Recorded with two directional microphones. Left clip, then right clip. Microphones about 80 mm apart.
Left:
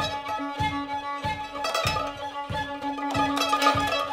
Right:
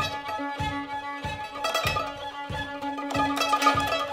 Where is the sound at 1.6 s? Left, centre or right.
Right.